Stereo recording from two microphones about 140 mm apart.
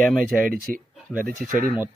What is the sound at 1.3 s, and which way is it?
Speech, 70° right (ahead or behind).